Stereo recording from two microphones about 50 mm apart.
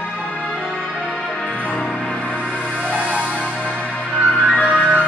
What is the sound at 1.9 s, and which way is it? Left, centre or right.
Music, centre.